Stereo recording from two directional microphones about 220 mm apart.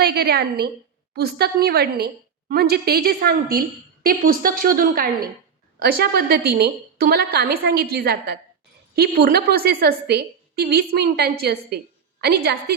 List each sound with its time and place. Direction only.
0.0 s a woman's voice: 45° right (ahead or behind)